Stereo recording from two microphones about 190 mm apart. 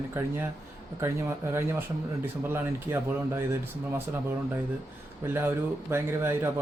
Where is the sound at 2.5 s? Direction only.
10° right (ahead or behind).